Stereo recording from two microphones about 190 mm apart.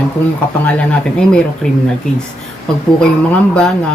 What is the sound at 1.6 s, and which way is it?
Speech, 5° left (ahead or behind).